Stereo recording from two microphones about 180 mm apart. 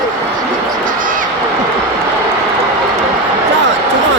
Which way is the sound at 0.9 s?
50° right (ahead or behind).